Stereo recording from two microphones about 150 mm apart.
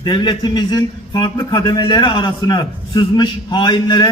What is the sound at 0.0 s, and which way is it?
A man's voice, 30° left (ahead or behind).